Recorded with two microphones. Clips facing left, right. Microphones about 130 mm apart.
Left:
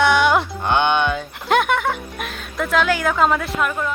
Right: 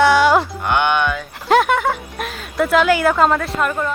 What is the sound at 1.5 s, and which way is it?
Speech, centre (ahead or behind).